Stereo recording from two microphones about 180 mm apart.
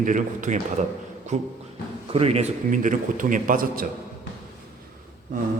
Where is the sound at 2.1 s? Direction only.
35° right (ahead or behind).